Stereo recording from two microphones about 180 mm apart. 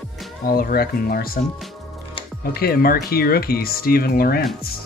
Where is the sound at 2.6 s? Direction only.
60° left (ahead or behind).